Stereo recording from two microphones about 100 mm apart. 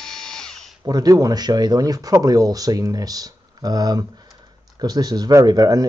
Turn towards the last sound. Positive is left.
turn(degrees=-40)  # may be behind; listen again after turning